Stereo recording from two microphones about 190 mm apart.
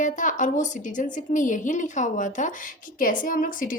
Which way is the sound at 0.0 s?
40° left (ahead or behind).